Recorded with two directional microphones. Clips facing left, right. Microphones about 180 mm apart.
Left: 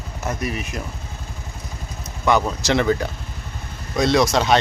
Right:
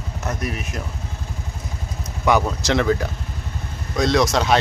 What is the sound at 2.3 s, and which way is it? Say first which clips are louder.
Speech: even; 10° right (ahead or behind).